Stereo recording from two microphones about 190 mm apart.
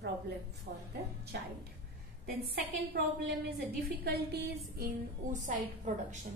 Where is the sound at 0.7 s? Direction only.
50° right (ahead or behind).